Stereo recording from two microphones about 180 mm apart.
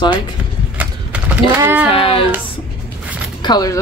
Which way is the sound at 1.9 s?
30° left (ahead or behind).